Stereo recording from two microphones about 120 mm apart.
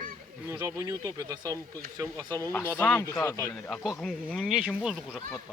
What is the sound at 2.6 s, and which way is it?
Speech, 15° left (ahead or behind).